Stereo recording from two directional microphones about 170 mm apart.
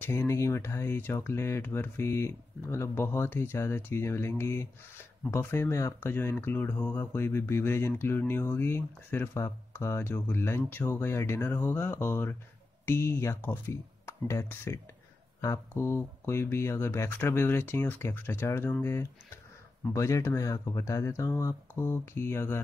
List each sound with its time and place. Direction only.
0.0 s speech: 15° left (ahead or behind)